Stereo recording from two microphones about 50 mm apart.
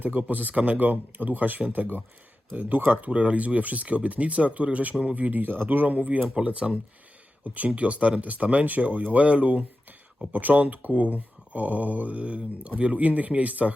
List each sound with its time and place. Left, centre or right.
0.0 s speech: right
3.1 s speech: right